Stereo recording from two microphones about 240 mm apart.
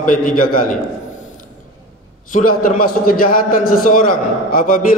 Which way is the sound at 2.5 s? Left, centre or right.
Left.